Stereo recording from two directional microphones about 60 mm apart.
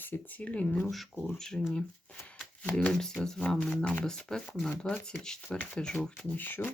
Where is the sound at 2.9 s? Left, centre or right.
Centre.